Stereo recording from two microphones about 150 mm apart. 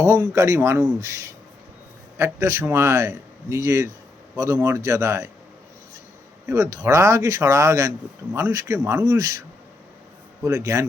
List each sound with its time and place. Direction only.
0.0 s speech: 20° right (ahead or behind)
6.5 s speech: 20° right (ahead or behind)
10.4 s speech: 20° right (ahead or behind)